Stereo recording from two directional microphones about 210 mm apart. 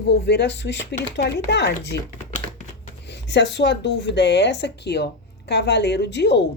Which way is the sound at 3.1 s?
55° left (ahead or behind).